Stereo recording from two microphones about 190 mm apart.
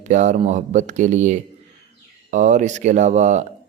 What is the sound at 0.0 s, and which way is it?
Speech, 40° right (ahead or behind).